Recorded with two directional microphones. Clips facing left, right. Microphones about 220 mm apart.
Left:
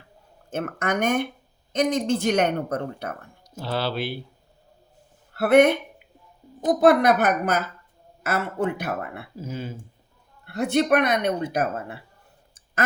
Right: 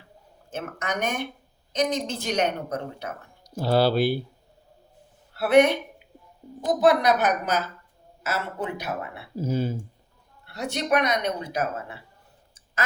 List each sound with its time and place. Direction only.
0.5 s speech: 55° left (ahead or behind)
3.6 s speech: 40° right (ahead or behind)
5.3 s speech: 55° left (ahead or behind)
6.7 s speech: 55° left (ahead or behind)
9.4 s speech: 35° right (ahead or behind)
10.4 s speech: 55° left (ahead or behind)